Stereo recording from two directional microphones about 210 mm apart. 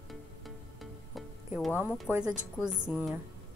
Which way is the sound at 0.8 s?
Centre (ahead or behind).